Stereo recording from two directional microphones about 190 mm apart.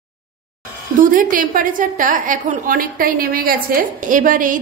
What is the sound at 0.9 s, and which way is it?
A woman's voice, 45° right (ahead or behind).